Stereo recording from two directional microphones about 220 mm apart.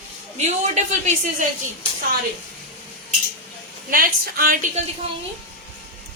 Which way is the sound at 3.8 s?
40° right (ahead or behind).